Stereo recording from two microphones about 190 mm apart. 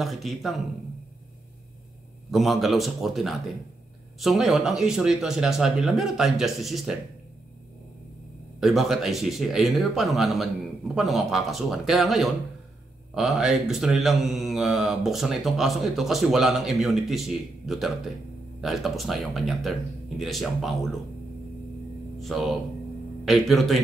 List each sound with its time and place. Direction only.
0.0 s speech: centre (ahead or behind)
2.3 s speech: centre (ahead or behind)
8.5 s speech: centre (ahead or behind)
22.2 s speech: centre (ahead or behind)